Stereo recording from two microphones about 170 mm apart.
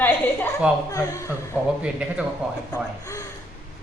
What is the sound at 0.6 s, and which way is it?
Speech, 5° right (ahead or behind).